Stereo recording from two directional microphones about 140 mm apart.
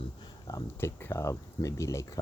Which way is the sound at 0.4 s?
20° left (ahead or behind).